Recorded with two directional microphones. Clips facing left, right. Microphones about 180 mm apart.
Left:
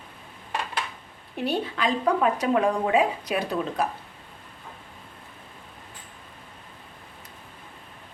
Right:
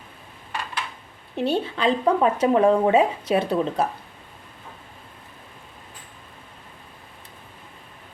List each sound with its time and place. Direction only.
1.4 s speech: 25° right (ahead or behind)